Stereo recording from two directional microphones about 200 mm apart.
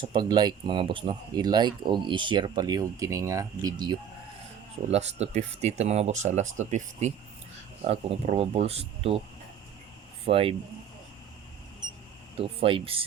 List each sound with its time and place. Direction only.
0.0 s speech: 25° right (ahead or behind)
4.9 s speech: 35° right (ahead or behind)
10.2 s speech: 30° right (ahead or behind)
12.4 s speech: 25° right (ahead or behind)